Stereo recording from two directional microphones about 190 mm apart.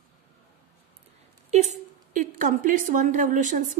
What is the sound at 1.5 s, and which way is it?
A woman's voice, 40° right (ahead or behind).